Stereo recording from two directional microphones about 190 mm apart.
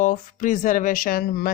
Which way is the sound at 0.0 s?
45° left (ahead or behind).